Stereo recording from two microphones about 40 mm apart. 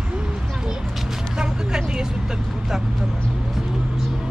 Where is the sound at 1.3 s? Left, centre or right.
Centre.